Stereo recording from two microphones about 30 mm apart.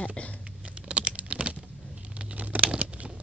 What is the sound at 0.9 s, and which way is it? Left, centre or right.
Typing, right.